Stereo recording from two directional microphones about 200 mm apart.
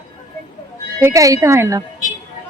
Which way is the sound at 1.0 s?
15° right (ahead or behind).